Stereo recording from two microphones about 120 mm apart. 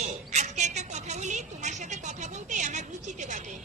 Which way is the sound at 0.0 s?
80° right.